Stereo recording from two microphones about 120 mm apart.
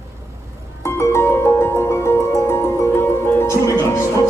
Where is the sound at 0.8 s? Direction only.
25° left (ahead or behind).